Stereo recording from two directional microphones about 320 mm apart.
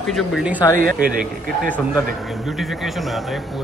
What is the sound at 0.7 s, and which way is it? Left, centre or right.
Speech, right.